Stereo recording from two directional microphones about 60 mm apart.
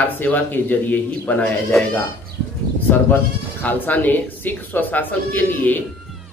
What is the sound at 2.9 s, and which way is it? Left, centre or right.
Speech, left.